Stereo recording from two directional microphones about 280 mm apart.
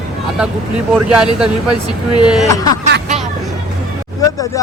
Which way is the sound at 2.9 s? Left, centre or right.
Right.